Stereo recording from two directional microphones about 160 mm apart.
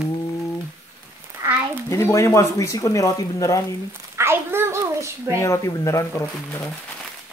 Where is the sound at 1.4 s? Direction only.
10° right (ahead or behind).